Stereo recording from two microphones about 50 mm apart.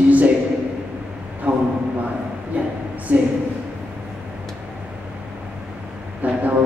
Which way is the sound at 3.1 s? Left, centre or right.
Right.